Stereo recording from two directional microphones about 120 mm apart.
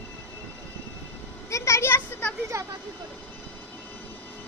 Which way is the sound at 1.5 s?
25° left (ahead or behind).